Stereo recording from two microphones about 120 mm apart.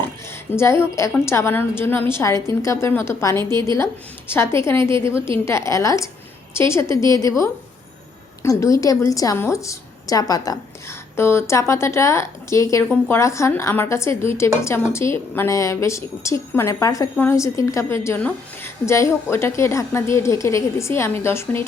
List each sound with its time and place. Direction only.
0.5 s a woman's voice: 20° left (ahead or behind)